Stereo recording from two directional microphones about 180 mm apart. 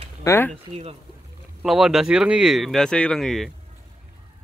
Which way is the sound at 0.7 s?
35° right (ahead or behind).